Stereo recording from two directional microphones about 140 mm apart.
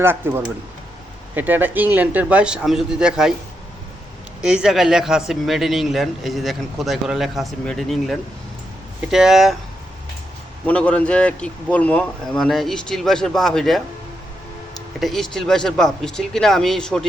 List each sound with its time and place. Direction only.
0.0 s speech: 15° right (ahead or behind)
4.4 s a man's voice: 5° right (ahead or behind)
10.7 s a man's voice: 10° left (ahead or behind)
14.9 s a man's voice: centre (ahead or behind)